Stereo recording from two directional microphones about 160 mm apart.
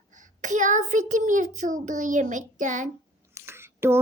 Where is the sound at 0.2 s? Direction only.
50° right (ahead or behind).